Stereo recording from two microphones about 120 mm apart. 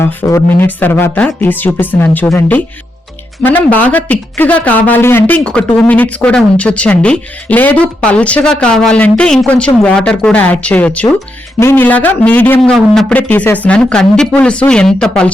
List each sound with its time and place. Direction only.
0.0 s speech: 20° left (ahead or behind)
12.7 s speech: 5° left (ahead or behind)
13.1 s speech: 15° left (ahead or behind)